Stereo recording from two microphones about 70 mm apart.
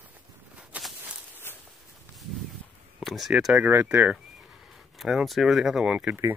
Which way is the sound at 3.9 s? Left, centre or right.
Right.